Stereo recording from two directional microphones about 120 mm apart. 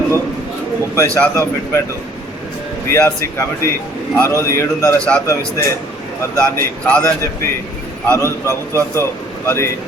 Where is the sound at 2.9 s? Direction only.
20° left (ahead or behind).